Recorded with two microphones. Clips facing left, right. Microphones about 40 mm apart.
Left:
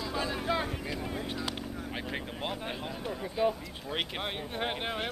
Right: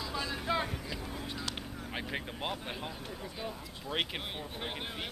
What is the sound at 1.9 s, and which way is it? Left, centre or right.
Vehicle, centre.